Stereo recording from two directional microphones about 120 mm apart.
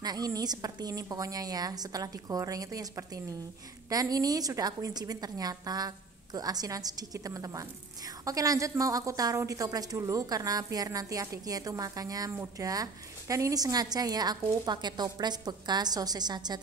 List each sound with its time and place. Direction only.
0.0 s a woman's voice: 35° right (ahead or behind)